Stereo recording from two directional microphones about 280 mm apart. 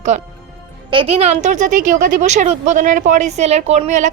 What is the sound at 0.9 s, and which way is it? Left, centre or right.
A woman's voice, centre.